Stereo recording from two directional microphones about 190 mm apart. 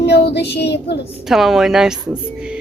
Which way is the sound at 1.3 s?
Centre (ahead or behind).